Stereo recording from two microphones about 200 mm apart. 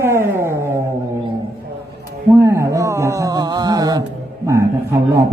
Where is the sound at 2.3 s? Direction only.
15° right (ahead or behind).